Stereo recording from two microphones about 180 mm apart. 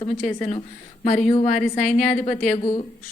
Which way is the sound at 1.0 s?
45° left (ahead or behind).